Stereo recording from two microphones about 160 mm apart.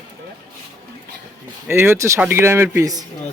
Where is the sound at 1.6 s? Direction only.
15° right (ahead or behind).